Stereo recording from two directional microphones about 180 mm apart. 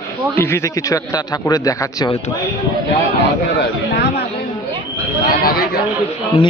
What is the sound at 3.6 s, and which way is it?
Chatter, 65° left (ahead or behind).